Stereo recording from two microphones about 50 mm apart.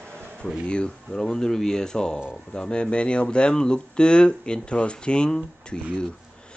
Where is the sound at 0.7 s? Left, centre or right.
Centre.